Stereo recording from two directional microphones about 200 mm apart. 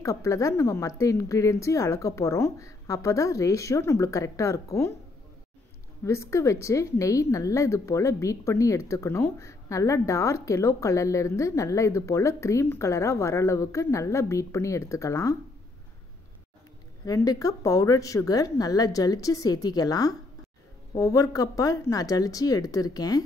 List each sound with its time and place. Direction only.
0.0 s a woman's voice: 15° left (ahead or behind)
6.0 s a woman's voice: 15° left (ahead or behind)
17.0 s a woman's voice: 20° left (ahead or behind)